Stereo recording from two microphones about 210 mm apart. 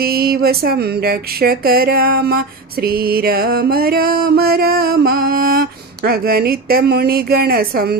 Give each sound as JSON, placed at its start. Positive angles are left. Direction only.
{"t": 0.0, "sound": "music", "side_deg": -45}